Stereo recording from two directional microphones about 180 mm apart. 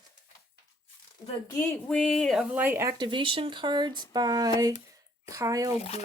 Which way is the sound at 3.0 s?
30° right (ahead or behind).